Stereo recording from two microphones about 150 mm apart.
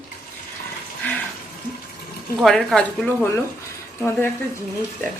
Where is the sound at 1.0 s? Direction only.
10° left (ahead or behind).